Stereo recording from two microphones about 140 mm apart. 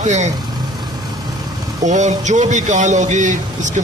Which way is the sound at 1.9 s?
60° right (ahead or behind).